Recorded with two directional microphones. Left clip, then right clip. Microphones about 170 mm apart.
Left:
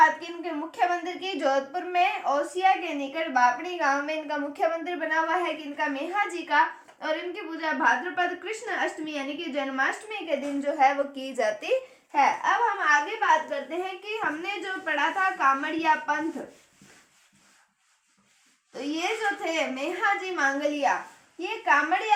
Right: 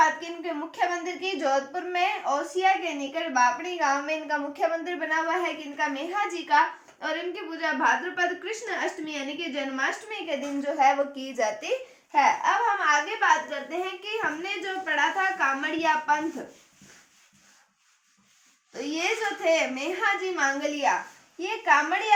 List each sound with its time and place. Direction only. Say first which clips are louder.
0.0 s a woman's voice: left 2 dB; 25° left (ahead or behind)
12.1 s babbling: right 1 dB; 15° left (ahead or behind)
14.0 s a woman's voice: even; 20° left (ahead or behind)
18.7 s a woman's voice: right 1 dB; 20° left (ahead or behind)